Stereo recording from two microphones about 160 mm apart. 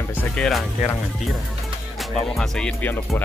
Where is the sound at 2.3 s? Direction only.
Centre (ahead or behind).